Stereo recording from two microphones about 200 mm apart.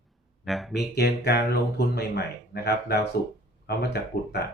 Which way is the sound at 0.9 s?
55° left (ahead or behind).